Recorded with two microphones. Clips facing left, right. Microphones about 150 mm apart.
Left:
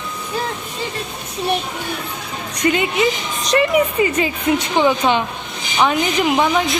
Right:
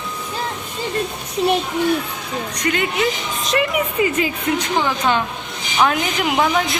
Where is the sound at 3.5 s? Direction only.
Centre (ahead or behind).